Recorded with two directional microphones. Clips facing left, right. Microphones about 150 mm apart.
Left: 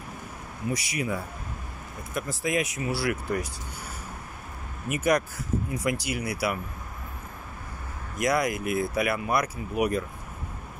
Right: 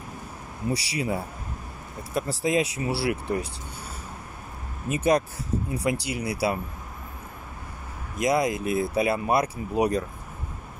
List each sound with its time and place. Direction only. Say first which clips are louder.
0.7 s speech: right 2 dB; 35° right (ahead or behind)
4.8 s speech: right 2 dB; 25° right (ahead or behind)
8.2 s speech: right 2 dB; 25° right (ahead or behind)